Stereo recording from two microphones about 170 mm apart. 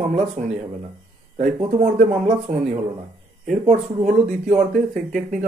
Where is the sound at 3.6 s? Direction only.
50° right (ahead or behind).